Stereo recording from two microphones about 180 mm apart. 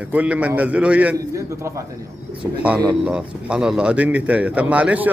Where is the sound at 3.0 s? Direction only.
5° right (ahead or behind).